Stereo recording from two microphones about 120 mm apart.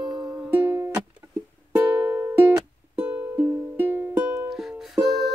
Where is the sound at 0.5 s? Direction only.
15° right (ahead or behind).